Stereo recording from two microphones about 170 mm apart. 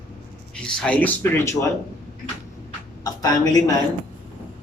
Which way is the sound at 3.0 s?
20° left (ahead or behind).